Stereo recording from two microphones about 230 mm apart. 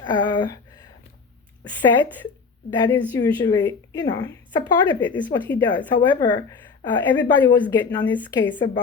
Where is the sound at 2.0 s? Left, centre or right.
Centre.